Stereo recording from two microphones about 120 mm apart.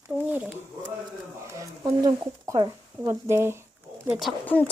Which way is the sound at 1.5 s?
30° right (ahead or behind).